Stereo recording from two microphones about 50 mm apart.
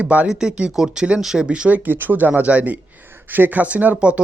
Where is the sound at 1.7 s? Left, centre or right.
Right.